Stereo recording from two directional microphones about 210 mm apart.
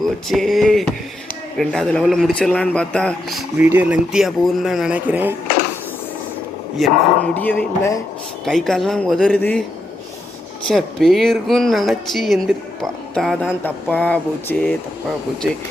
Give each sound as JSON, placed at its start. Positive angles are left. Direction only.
{"t": 0.3, "sound": "speech", "side_deg": 0}
{"t": 6.8, "sound": "speech", "side_deg": 0}
{"t": 10.7, "sound": "speech", "side_deg": 0}